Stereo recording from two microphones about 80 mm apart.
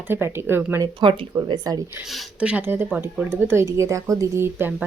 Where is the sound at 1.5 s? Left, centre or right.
Right.